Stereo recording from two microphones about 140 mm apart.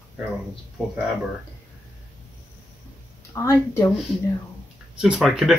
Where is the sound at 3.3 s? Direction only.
20° left (ahead or behind).